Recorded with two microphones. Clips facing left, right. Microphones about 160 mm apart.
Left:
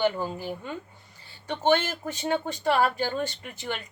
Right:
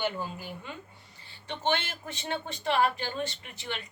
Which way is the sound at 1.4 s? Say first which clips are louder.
Left 7 dB; 45° left (ahead or behind).